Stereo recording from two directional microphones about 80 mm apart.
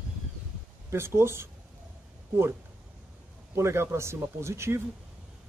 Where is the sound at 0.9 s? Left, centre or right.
Right.